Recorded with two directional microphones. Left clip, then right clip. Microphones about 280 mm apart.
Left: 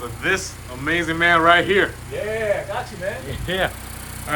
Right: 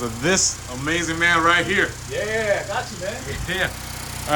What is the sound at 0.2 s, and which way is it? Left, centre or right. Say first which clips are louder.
Speech: even; centre.